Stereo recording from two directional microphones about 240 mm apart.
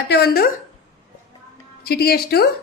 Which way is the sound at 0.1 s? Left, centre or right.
Left.